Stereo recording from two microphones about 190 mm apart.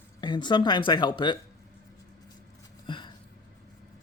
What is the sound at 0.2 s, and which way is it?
Speech, 25° left (ahead or behind).